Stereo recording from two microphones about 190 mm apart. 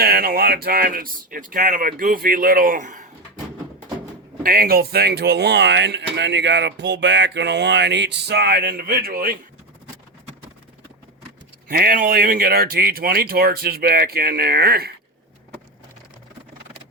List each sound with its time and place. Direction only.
0.0 s speech: 55° right (ahead or behind)
4.4 s speech: 55° right (ahead or behind)
11.7 s speech: 50° right (ahead or behind)